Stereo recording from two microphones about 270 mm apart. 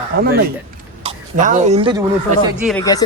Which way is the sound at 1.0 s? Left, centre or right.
Right.